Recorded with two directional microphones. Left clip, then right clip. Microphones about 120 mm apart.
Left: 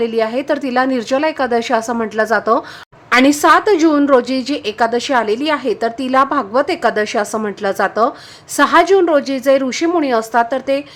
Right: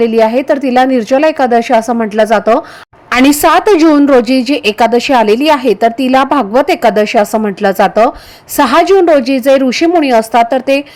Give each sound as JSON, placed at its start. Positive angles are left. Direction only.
{"t": 0.0, "sound": "a woman's voice", "side_deg": -35}
{"t": 3.1, "sound": "a woman's voice", "side_deg": -45}